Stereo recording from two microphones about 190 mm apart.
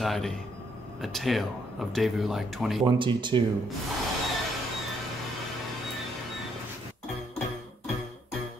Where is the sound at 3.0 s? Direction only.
25° right (ahead or behind).